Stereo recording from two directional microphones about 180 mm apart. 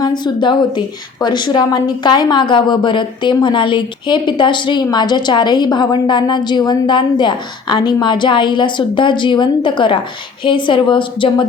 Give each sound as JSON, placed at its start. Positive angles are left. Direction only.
{"t": 0.0, "sound": "a woman's voice", "side_deg": 25}